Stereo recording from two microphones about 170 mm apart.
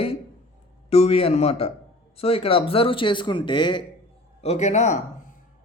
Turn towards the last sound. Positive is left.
turn(degrees=45)  # may be behind; listen again after turning